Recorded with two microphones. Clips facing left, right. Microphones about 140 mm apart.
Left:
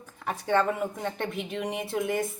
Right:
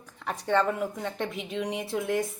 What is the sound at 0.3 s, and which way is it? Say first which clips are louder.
A woman's voice: even; 5° left (ahead or behind).